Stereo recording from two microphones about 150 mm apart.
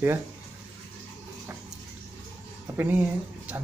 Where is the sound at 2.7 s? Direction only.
15° right (ahead or behind).